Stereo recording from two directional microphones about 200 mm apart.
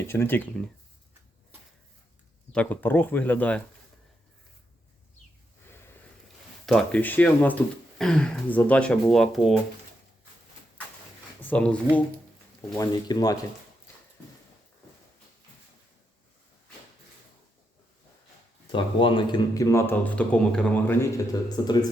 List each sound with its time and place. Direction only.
0.1 s speech: 10° left (ahead or behind)
2.5 s speech: 5° left (ahead or behind)
6.7 s speech: 5° left (ahead or behind)
11.4 s speech: 5° left (ahead or behind)
12.7 s speech: 20° left (ahead or behind)
18.7 s speech: 25° left (ahead or behind)